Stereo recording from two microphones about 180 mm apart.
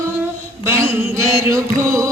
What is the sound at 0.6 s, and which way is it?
Mantra, 15° right (ahead or behind).